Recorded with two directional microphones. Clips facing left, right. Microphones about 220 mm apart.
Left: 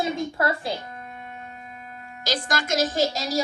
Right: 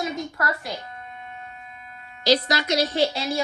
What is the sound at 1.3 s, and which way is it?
Speech, 45° left (ahead or behind).